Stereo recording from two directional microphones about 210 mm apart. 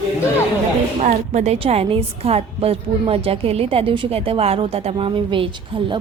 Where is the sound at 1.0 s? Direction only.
35° right (ahead or behind).